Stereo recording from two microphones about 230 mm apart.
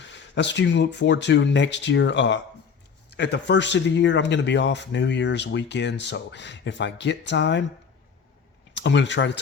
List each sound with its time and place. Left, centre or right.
0.0 s speech: left
8.7 s speech: left